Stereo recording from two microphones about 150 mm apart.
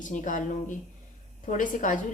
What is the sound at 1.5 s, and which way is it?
Speech, 60° left (ahead or behind).